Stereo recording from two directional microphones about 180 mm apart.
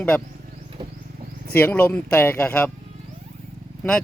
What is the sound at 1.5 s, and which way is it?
Speech, 10° left (ahead or behind).